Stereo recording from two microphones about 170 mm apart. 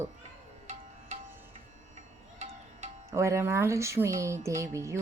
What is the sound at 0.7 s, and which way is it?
Music, 40° right (ahead or behind).